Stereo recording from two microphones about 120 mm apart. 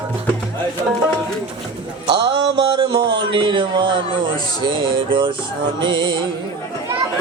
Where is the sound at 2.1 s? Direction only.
45° right (ahead or behind).